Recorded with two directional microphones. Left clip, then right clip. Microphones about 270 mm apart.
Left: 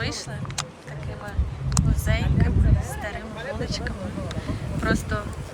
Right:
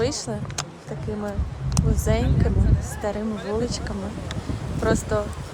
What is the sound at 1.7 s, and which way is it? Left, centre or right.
Speech, right.